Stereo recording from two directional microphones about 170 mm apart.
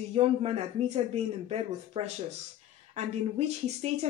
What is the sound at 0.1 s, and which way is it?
Speech, 35° right (ahead or behind).